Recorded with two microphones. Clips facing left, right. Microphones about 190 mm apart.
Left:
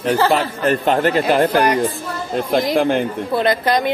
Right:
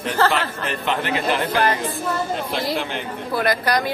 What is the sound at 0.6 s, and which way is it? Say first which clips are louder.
Speech: left 12 dB; 45° left (ahead or behind).